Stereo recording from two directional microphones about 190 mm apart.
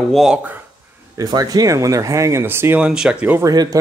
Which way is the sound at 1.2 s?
20° right (ahead or behind).